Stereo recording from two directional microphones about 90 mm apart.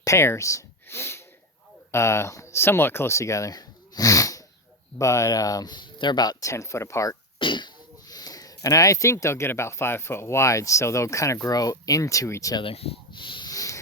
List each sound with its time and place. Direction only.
0.0 s speech: 30° left (ahead or behind); by 6.5 s 50° left (ahead or behind)
6.5 s speech: 30° left (ahead or behind)
7.3 s speech: 65° left (ahead or behind)
8.0 s speech: 45° left (ahead or behind)
13.1 s a sound: 65° left (ahead or behind)
13.5 s a sound: 40° left (ahead or behind)